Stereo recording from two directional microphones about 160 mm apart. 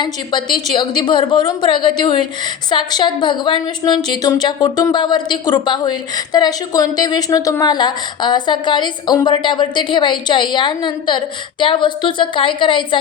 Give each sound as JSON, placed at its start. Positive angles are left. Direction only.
{"t": 0.0, "sound": "a woman's voice", "side_deg": 30}